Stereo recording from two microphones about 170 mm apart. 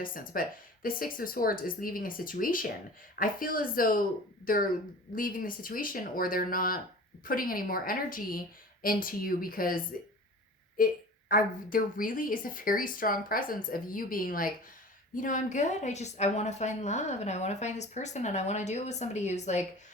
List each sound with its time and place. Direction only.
0.0 s a woman's voice: 55° left (ahead or behind)